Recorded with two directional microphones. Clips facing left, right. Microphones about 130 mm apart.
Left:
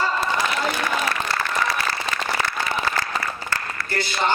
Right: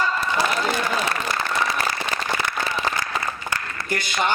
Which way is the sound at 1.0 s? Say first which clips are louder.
Even; 25° right (ahead or behind).